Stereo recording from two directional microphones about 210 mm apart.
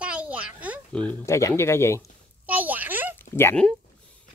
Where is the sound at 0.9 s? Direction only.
5° left (ahead or behind).